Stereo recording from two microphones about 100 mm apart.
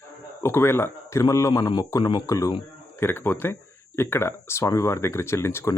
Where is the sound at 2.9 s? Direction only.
20° left (ahead or behind).